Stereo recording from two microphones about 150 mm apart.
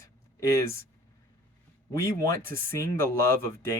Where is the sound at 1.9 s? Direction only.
20° left (ahead or behind).